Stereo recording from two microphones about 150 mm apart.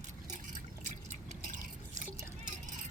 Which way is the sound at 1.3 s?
55° right (ahead or behind).